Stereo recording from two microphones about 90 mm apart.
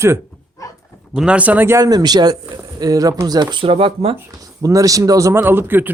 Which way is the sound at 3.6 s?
90° right.